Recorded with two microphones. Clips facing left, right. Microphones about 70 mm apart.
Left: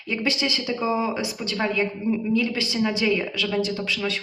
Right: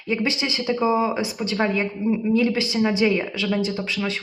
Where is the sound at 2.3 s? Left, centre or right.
Right.